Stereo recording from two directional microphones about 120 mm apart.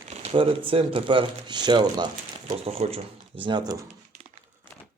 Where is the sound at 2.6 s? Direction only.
60° right (ahead or behind); by 3.8 s 35° right (ahead or behind).